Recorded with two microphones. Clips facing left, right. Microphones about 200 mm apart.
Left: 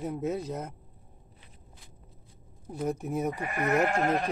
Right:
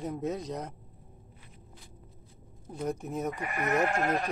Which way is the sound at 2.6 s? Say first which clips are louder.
Left 2 dB; 10° left (ahead or behind).